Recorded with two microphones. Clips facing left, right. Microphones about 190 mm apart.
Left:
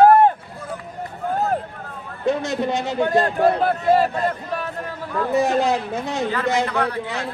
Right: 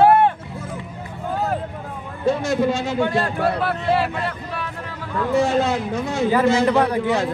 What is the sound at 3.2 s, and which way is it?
Speech, 40° left (ahead or behind).